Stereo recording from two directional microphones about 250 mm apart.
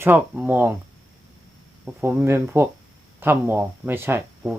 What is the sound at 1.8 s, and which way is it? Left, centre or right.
Speech, centre.